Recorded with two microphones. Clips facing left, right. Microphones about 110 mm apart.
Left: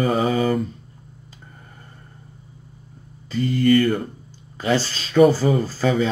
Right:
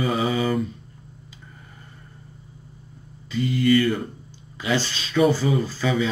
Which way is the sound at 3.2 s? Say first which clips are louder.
Left 2 dB; 40° left (ahead or behind).